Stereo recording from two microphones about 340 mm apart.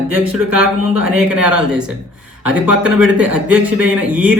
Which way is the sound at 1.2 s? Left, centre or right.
Centre.